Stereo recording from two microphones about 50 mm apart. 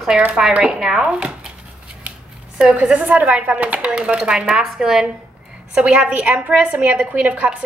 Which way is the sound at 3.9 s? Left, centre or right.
Right.